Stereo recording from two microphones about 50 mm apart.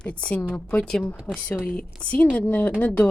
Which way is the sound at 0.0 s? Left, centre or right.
Left.